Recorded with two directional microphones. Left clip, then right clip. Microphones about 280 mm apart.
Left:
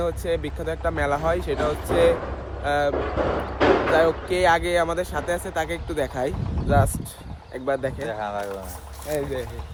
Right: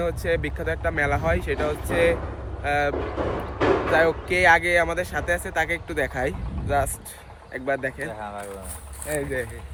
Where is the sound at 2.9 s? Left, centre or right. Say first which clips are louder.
Left 3 dB; left.